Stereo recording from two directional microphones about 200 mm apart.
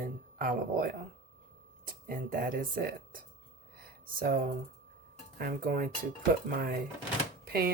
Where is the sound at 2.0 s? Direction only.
45° right (ahead or behind).